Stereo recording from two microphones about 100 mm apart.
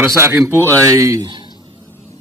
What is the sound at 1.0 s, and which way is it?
Speech, 35° right (ahead or behind).